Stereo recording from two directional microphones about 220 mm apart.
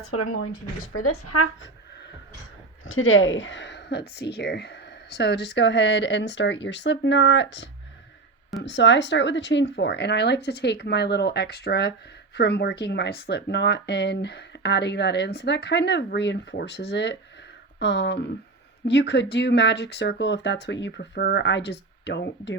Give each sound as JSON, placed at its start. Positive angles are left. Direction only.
{"t": 0.0, "sound": "speech", "side_deg": 80}
{"t": 2.8, "sound": "speech", "side_deg": 60}